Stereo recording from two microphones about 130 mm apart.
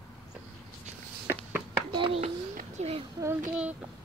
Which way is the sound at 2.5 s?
65° right (ahead or behind).